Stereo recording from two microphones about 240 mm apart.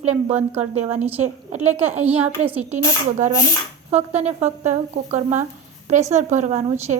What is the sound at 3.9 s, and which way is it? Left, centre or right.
Speech, right.